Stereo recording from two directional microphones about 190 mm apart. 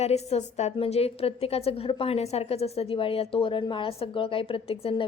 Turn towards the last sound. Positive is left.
turn(degrees=30)  # may be behind; listen again after turning